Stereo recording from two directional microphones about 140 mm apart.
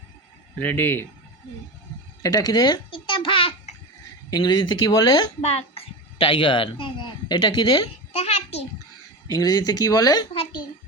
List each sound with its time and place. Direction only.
0.6 s speech: 15° left (ahead or behind)
2.2 s babbling: 25° left (ahead or behind)
4.3 s speech: 30° left (ahead or behind)
5.4 s a woman's voice: 50° left (ahead or behind); by 7.8 s 35° left (ahead or behind)
8.1 s a sound: 50° left (ahead or behind)
9.2 s speech: 30° left (ahead or behind)
10.3 s a child's voice: 40° left (ahead or behind)